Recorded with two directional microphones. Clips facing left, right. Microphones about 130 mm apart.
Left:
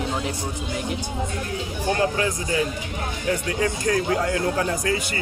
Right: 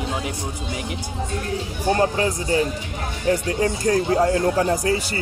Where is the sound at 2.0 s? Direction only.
35° right (ahead or behind).